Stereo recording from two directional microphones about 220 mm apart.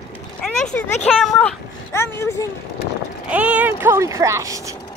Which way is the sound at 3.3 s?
5° right (ahead or behind).